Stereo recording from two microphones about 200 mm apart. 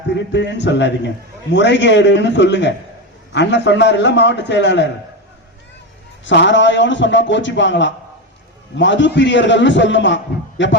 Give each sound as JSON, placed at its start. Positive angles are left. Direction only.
{"t": 0.1, "sound": "a man's voice", "side_deg": 60}
{"t": 6.2, "sound": "a man's voice", "side_deg": 65}